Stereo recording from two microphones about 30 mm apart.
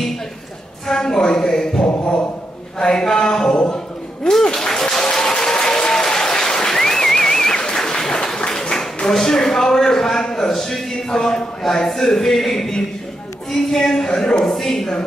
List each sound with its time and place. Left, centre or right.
0.8 s speech: centre
3.6 s a sound: left
4.3 s speech: centre
5.0 s applause: left
8.0 s a sound: centre
10.5 s speech: centre
13.7 s speech: centre